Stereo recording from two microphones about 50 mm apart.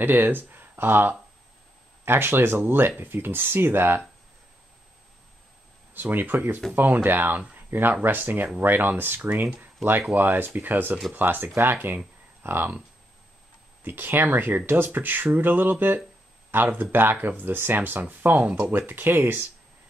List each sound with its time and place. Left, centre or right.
0.0 s speech: right
5.9 s speech: right
13.8 s speech: right